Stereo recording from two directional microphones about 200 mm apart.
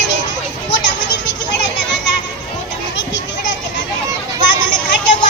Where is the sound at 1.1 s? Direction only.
60° left (ahead or behind).